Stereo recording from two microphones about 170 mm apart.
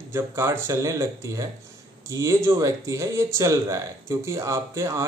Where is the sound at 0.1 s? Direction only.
15° right (ahead or behind).